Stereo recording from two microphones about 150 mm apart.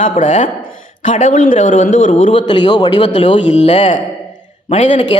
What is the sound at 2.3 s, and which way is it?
A man's voice, 30° left (ahead or behind).